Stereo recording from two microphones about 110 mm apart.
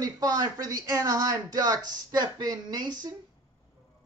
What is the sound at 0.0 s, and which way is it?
Speech, 35° right (ahead or behind).